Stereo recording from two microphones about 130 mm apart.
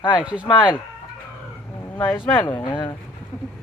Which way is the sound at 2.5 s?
35° left (ahead or behind).